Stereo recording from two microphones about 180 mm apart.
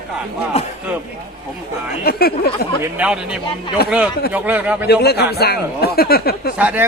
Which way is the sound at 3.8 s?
60° left (ahead or behind).